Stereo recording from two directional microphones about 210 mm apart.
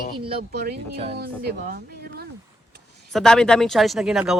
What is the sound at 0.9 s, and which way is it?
Speech, 30° right (ahead or behind).